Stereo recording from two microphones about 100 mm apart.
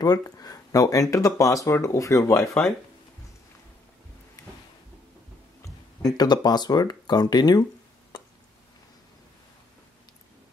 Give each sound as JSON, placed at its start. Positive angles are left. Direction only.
{"t": 0.0, "sound": "speech", "side_deg": 40}
{"t": 4.4, "sound": "drawer open or close", "side_deg": 35}
{"t": 5.6, "sound": "speech", "side_deg": 40}